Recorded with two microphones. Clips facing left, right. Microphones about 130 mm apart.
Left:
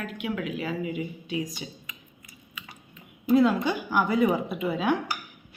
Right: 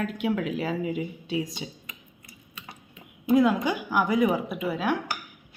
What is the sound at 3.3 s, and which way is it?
Speech, 15° right (ahead or behind).